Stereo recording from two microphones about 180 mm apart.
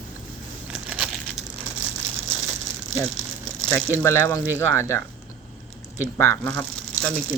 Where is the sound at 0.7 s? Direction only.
5° right (ahead or behind).